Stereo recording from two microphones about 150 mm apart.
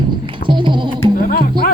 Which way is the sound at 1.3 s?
85° left.